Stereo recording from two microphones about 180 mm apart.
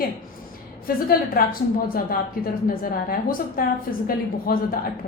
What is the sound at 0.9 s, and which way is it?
A woman's voice, 55° left (ahead or behind).